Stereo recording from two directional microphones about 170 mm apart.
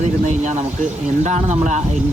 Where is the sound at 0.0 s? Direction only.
45° right (ahead or behind).